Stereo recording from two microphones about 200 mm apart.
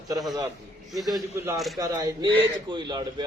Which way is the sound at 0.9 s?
Centre (ahead or behind).